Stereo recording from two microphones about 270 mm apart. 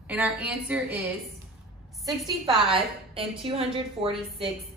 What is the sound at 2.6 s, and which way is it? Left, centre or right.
A woman's voice, centre.